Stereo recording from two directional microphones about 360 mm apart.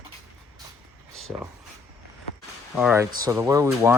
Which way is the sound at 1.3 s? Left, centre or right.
Centre.